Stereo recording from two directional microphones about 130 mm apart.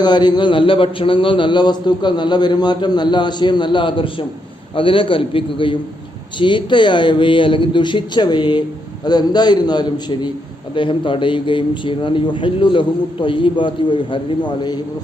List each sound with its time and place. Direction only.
0.0 s a man's voice: 35° left (ahead or behind)